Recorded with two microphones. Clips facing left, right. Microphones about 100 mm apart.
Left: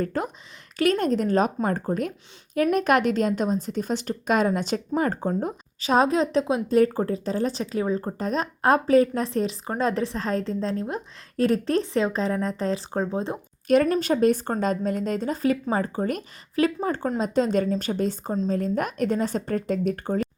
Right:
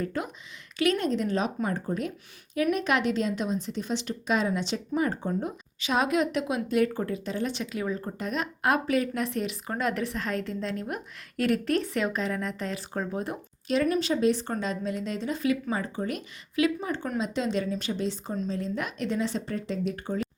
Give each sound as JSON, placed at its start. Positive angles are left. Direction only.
{"t": 0.0, "sound": "a woman's voice", "side_deg": 40}
{"t": 13.8, "sound": "a woman's voice", "side_deg": 45}